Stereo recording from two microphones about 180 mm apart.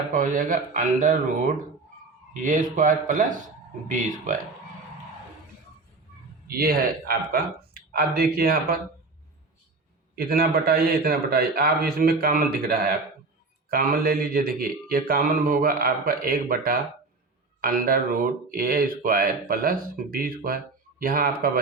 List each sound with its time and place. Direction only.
0.1 s speech: 45° right (ahead or behind)
2.4 s speech: 45° right (ahead or behind)
6.5 s speech: 55° right (ahead or behind)
10.2 s speech: 55° right (ahead or behind)